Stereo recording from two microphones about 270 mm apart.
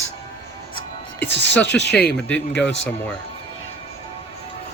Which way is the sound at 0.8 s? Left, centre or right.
Left.